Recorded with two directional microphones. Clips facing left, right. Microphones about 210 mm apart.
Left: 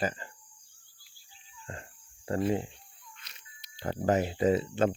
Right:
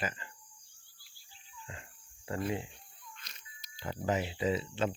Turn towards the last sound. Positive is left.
turn(degrees=50)  # may be behind; listen again after turning